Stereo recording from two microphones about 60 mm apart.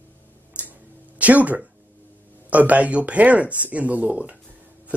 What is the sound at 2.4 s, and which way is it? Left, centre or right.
A man's voice, right.